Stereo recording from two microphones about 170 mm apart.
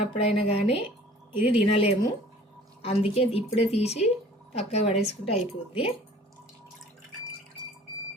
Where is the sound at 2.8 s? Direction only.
35° left (ahead or behind).